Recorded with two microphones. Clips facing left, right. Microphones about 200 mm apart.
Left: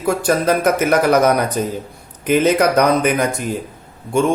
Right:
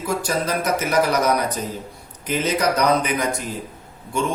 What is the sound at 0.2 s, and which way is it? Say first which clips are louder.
Speech: left 7 dB; 55° left (ahead or behind).